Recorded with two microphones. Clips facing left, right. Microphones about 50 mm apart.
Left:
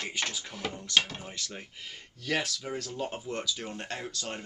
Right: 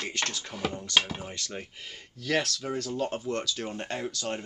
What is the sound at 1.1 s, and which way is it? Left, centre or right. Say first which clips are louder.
Speech: right 4 dB; centre.